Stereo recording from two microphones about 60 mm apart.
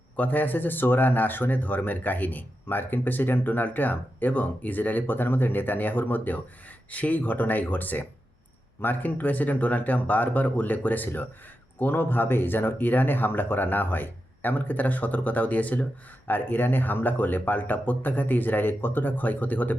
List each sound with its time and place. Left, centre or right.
0.2 s speech: left